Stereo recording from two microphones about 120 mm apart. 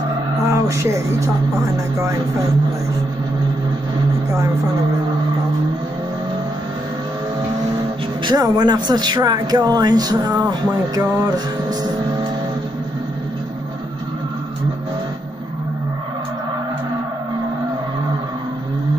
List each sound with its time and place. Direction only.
0.5 s speech: 25° right (ahead or behind)
8.3 s speech: 35° right (ahead or behind)
11.0 s music: 35° right (ahead or behind)